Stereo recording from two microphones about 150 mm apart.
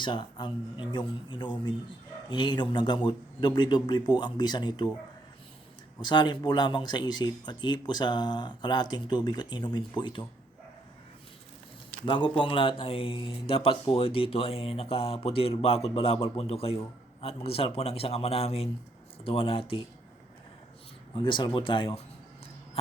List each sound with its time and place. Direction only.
0.0 s speech: 30° left (ahead or behind)
6.0 s speech: 30° left (ahead or behind)
12.0 s speech: 35° left (ahead or behind)
21.2 s speech: 30° left (ahead or behind)